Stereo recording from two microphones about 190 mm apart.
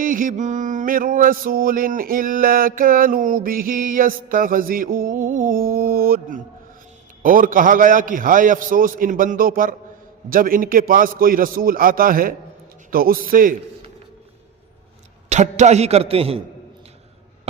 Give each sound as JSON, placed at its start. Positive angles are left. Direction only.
{"t": 0.0, "sound": "mantra", "side_deg": -45}
{"t": 15.3, "sound": "a man's voice", "side_deg": -40}